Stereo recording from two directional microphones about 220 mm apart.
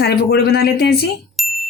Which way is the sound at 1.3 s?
Centre (ahead or behind).